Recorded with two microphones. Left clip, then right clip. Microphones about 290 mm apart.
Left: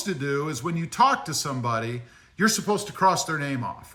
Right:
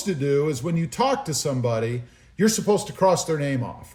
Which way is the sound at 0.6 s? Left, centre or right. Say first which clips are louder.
Right 2 dB; centre.